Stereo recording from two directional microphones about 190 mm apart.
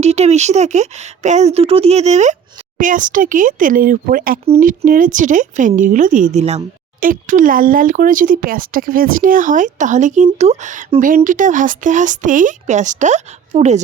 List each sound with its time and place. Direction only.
0.0 s speech: 35° right (ahead or behind)